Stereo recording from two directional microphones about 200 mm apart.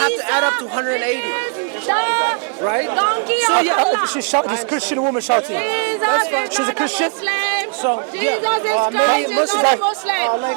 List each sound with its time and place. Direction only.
0.0 s a man's voice: 20° right (ahead or behind)